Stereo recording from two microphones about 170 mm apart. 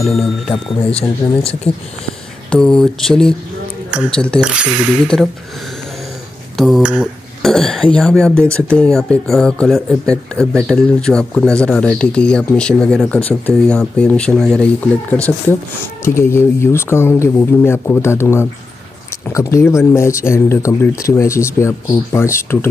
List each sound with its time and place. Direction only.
0.0 s speech: centre (ahead or behind)
0.9 s speech: 35° left (ahead or behind)
2.5 s speech: 5° left (ahead or behind)
6.5 s speech: centre (ahead or behind); by 22.7 s 15° left (ahead or behind)